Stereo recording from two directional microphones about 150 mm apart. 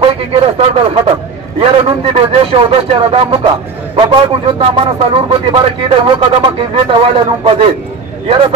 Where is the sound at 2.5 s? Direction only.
35° right (ahead or behind).